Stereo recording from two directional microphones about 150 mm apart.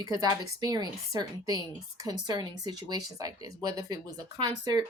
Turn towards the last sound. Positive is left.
turn(degrees=-25)  # may be behind; listen again after turning